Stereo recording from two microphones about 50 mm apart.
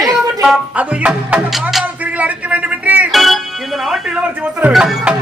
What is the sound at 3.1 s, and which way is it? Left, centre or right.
Music, centre.